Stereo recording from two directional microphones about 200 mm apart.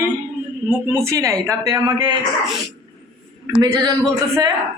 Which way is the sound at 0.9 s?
15° right (ahead or behind).